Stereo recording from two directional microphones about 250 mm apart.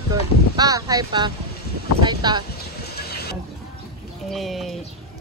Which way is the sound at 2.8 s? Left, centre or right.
Left.